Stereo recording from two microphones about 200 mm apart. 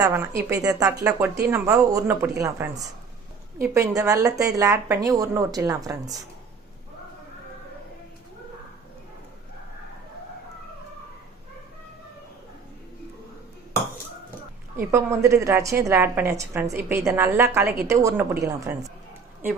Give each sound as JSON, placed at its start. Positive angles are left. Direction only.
{"t": 0.0, "sound": "a woman's voice", "side_deg": -15}
{"t": 14.8, "sound": "a woman's voice", "side_deg": -15}